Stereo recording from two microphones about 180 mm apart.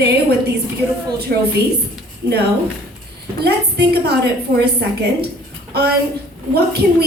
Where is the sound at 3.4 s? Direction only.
65° right (ahead or behind).